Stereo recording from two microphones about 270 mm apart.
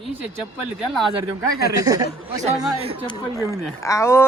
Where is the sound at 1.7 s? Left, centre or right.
Centre.